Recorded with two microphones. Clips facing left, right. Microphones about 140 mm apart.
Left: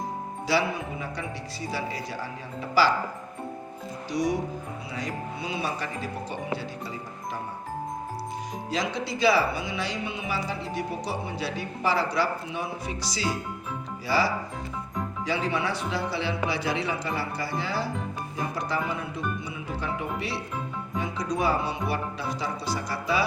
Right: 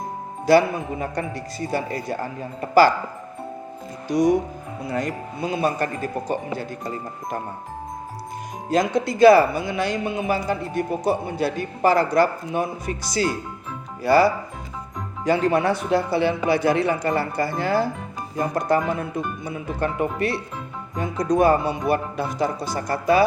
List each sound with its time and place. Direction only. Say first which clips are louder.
0.4 s a man's voice: right 10 dB; 50° right (ahead or behind)
4.1 s a man's voice: right 8 dB; 50° right (ahead or behind)
8.7 s a man's voice: right 9 dB; 50° right (ahead or behind)